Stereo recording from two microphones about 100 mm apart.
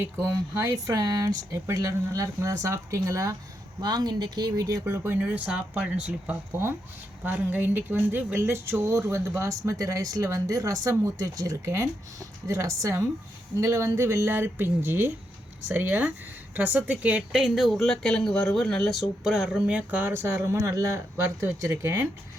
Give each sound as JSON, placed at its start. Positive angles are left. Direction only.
{"t": 0.6, "sound": "speech", "side_deg": -35}
{"t": 5.2, "sound": "speech", "side_deg": -10}
{"t": 6.5, "sound": "speech", "side_deg": -25}